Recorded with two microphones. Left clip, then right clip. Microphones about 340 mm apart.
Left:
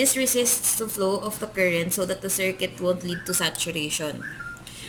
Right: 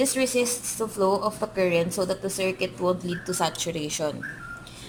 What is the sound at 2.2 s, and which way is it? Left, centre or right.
Speech, right.